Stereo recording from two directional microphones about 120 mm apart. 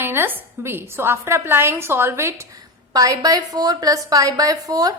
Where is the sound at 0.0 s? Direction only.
20° right (ahead or behind).